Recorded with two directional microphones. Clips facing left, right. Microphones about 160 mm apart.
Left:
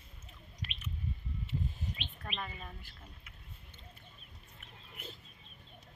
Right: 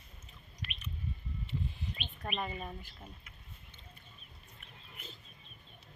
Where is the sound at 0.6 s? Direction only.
45° left (ahead or behind).